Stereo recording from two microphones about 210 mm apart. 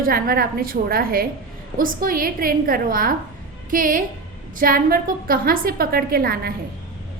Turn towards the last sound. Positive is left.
turn(degrees=-45)  # may be behind; listen again after turning